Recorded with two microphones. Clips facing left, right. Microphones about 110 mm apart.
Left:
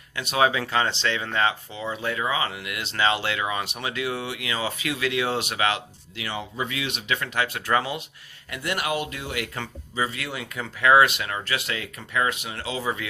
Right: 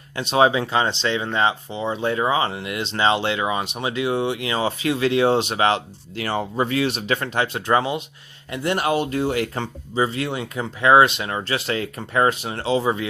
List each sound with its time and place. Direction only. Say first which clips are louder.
0.2 s speech: right 5 dB; 30° right (ahead or behind)
6.1 s speech: right 8 dB; 45° right (ahead or behind); by 13.1 s 30° right (ahead or behind)